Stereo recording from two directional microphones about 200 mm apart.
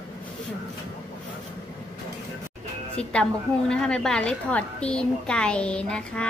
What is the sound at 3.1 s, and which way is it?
A woman's voice, 5° left (ahead or behind).